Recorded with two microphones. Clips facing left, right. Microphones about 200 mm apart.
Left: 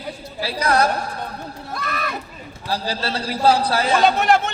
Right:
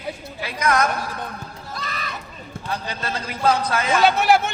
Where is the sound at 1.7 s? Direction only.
60° left (ahead or behind).